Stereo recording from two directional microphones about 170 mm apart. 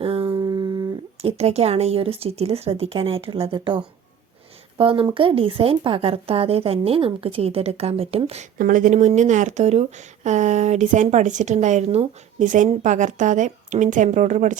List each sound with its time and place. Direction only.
0.0 s humming: 35° right (ahead or behind)
0.3 s humming: 25° right (ahead or behind)
1.2 s speech: 40° right (ahead or behind)
8.5 s speech: 50° right (ahead or behind)